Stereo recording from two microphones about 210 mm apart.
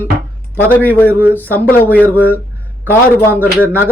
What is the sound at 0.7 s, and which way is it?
A man's voice, 10° left (ahead or behind).